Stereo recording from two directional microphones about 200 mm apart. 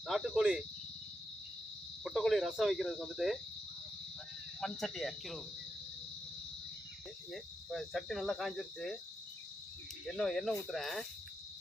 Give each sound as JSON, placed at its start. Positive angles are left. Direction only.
{"t": 0.0, "sound": "speech", "side_deg": 0}
{"t": 2.0, "sound": "speech", "side_deg": 0}
{"t": 4.6, "sound": "speech", "side_deg": 0}
{"t": 7.3, "sound": "speech", "side_deg": 0}
{"t": 10.1, "sound": "speech", "side_deg": 0}